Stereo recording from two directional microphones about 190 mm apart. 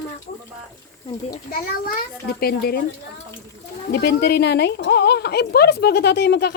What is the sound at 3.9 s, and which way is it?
A woman's voice, 60° left (ahead or behind).